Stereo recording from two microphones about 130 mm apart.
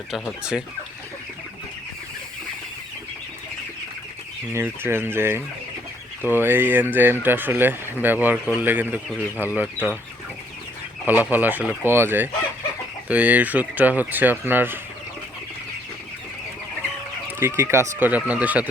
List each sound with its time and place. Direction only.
4.5 s speech: 20° right (ahead or behind)
11.0 s speech: 15° right (ahead or behind)
17.4 s speech: 20° right (ahead or behind)